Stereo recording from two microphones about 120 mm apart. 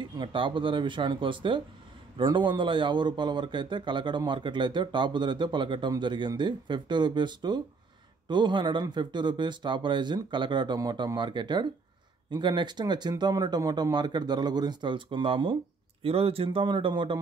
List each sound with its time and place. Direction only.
0.0 s speech: 45° right (ahead or behind)